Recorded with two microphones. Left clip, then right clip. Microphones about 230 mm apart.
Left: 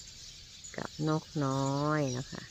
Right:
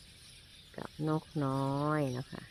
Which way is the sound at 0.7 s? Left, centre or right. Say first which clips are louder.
Left 2 dB; centre.